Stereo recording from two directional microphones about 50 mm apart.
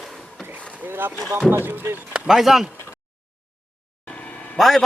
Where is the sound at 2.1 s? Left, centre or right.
Centre.